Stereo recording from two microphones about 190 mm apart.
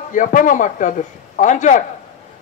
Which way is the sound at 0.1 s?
45° left (ahead or behind).